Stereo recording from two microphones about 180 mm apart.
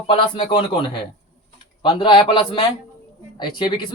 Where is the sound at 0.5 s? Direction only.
25° left (ahead or behind).